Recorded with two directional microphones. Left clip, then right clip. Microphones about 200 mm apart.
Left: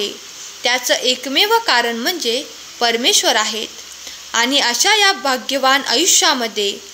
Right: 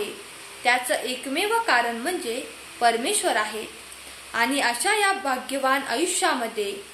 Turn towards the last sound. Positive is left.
turn(degrees=50)  # may be behind; listen again after turning